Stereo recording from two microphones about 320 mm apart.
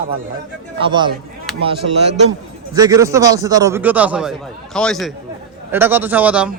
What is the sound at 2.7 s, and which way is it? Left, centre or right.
A man's voice, centre.